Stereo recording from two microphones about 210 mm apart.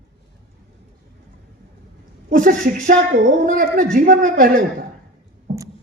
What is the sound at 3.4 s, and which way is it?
A man's voice, 40° right (ahead or behind).